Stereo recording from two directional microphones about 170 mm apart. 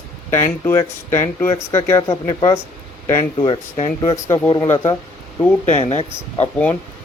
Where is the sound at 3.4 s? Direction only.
35° left (ahead or behind).